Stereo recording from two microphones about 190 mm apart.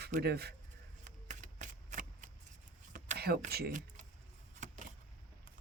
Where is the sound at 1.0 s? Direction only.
40° right (ahead or behind).